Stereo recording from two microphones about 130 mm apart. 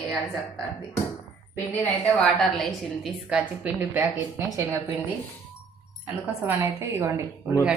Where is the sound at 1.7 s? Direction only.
15° left (ahead or behind).